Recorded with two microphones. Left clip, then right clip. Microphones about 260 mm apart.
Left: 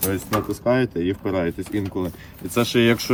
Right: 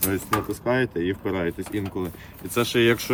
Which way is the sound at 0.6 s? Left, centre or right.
Centre.